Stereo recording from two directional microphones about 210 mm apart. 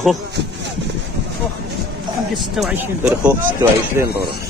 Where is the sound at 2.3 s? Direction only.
Centre (ahead or behind).